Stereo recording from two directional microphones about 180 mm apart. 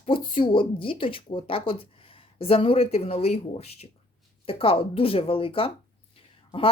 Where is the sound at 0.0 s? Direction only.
30° left (ahead or behind).